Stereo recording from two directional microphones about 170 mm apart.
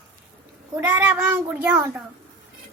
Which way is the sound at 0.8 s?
10° right (ahead or behind).